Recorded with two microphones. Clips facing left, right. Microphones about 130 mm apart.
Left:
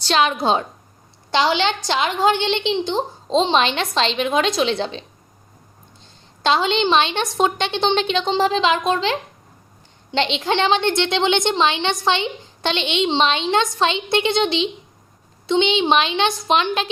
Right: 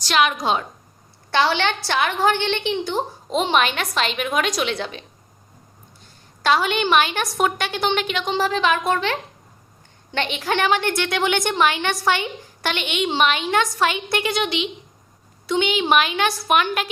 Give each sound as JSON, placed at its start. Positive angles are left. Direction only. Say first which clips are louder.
{"t": 0.0, "sound": "a woman's voice", "louder": "left 2 dB", "side_deg": 30}
{"t": 1.3, "sound": "a woman's voice", "louder": "left 1 dB", "side_deg": 15}
{"t": 6.4, "sound": "a woman's voice", "louder": "left 1 dB", "side_deg": 25}